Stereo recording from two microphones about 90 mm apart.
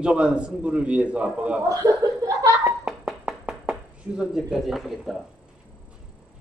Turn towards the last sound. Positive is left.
turn(degrees=0)  # may be behind; listen again after turning